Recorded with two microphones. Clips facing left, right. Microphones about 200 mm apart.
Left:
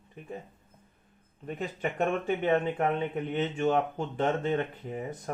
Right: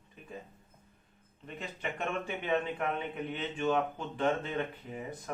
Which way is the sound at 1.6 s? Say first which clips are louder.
Left 7 dB; 50° left (ahead or behind).